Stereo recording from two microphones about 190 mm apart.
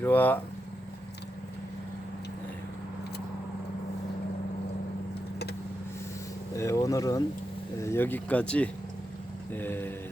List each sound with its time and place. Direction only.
0.0 s speech: 10° left (ahead or behind)
6.6 s speech: 15° left (ahead or behind)